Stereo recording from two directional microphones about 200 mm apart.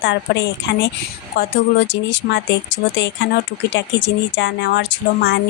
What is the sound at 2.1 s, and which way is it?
Speech, 60° left (ahead or behind).